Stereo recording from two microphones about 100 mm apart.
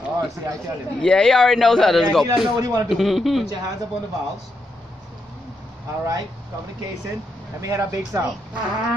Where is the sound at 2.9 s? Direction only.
Centre (ahead or behind).